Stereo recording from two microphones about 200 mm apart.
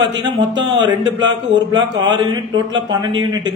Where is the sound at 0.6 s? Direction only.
20° right (ahead or behind).